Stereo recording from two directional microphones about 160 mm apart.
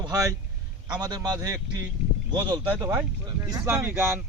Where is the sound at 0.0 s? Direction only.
20° right (ahead or behind).